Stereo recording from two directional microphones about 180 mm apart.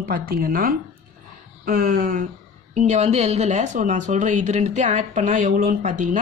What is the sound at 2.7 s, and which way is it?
A woman's voice, 40° right (ahead or behind).